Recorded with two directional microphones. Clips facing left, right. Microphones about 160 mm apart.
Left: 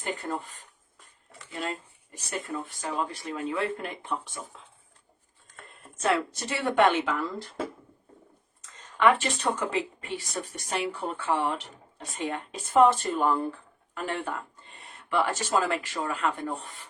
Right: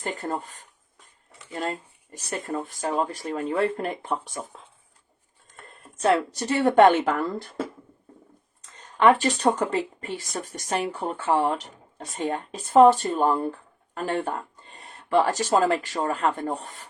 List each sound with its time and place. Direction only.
0.0 s speech: 40° right (ahead or behind)
2.8 s speech: 40° right (ahead or behind)
6.0 s speech: 40° right (ahead or behind)
9.0 s speech: 35° right (ahead or behind)